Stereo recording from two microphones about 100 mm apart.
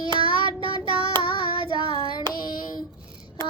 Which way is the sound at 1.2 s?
60° left (ahead or behind).